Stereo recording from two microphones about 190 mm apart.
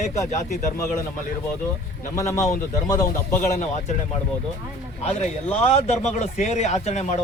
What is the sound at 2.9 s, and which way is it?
Speech, 15° left (ahead or behind).